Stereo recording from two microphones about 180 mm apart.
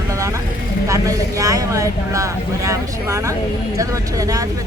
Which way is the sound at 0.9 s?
20° right (ahead or behind).